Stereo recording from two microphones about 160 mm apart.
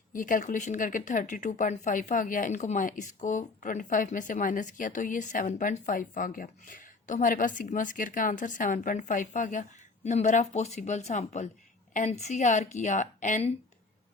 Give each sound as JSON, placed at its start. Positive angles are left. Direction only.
{"t": 0.1, "sound": "a woman's voice", "side_deg": 55}